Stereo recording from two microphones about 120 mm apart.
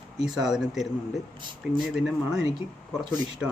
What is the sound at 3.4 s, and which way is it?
Speech, 5° right (ahead or behind).